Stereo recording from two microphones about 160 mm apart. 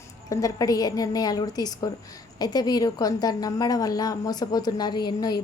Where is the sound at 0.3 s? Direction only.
20° left (ahead or behind).